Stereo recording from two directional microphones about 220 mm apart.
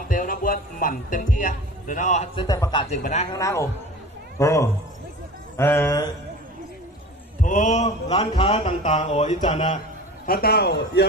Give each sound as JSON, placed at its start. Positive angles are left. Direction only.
{"t": 0.1, "sound": "speech", "side_deg": 35}
{"t": 2.3, "sound": "speech", "side_deg": 15}
{"t": 3.0, "sound": "speech", "side_deg": 30}
{"t": 3.3, "sound": "speech", "side_deg": 15}
{"t": 7.4, "sound": "speech", "side_deg": 35}
{"t": 10.2, "sound": "a man's voice", "side_deg": 45}